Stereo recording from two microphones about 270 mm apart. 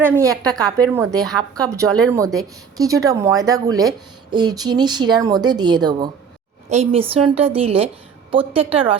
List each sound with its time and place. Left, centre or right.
0.0 s a woman's voice: centre